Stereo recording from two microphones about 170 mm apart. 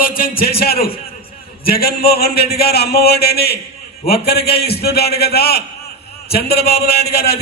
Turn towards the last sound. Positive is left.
turn(degrees=70)  # may be behind; listen again after turning